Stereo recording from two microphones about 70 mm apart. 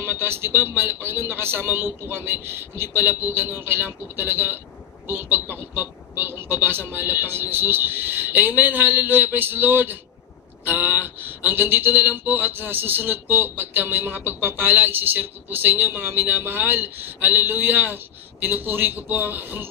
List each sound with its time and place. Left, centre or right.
0.0 s a man's voice: right